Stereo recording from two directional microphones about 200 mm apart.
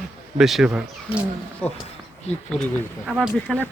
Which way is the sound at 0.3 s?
Centre (ahead or behind).